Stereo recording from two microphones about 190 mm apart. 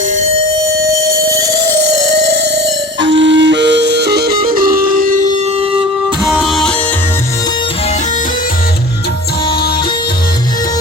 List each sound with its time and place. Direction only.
3.0 s music: 70° right (ahead or behind); by 5.6 s 40° right (ahead or behind)
6.2 s music: centre (ahead or behind)